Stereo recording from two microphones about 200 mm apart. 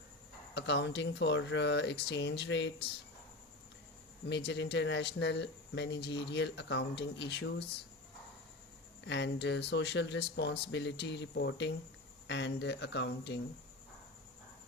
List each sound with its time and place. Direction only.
0.5 s speech: 60° left (ahead or behind)
4.3 s speech: 60° left (ahead or behind)
9.0 s speech: 60° left (ahead or behind)